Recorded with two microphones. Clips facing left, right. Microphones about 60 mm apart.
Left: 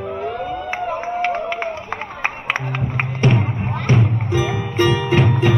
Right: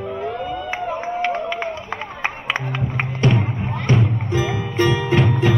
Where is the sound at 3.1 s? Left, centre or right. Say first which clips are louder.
Left 1 dB; left.